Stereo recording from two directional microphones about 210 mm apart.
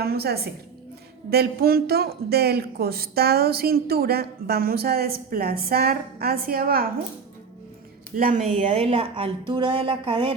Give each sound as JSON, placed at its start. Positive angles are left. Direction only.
{"t": 0.0, "sound": "speech", "side_deg": -50}
{"t": 8.1, "sound": "a woman's voice", "side_deg": -40}